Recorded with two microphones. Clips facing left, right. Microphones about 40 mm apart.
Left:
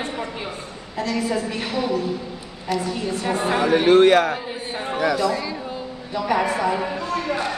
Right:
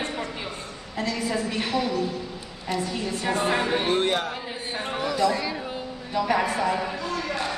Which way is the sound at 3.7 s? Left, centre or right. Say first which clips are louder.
Left 9 dB; left.